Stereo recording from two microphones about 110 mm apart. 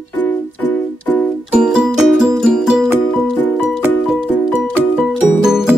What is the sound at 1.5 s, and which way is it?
Music, 10° right (ahead or behind).